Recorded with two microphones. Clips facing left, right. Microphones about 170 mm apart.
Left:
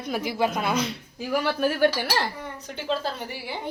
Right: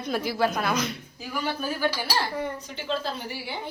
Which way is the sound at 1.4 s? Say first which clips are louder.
Left 5 dB; 70° left (ahead or behind).